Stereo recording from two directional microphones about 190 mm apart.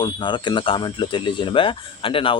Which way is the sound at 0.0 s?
25° left (ahead or behind).